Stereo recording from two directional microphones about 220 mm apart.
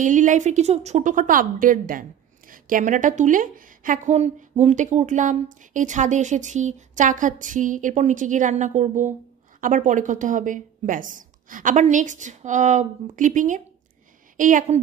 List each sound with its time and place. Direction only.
0.0 s a woman's voice: 35° right (ahead or behind)